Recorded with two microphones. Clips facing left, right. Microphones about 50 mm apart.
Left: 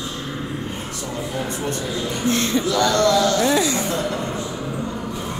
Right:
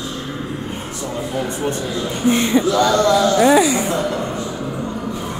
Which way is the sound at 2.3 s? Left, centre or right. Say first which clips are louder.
Right 5 dB; centre.